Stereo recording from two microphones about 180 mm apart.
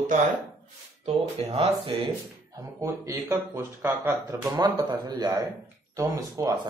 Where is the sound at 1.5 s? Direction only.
30° right (ahead or behind).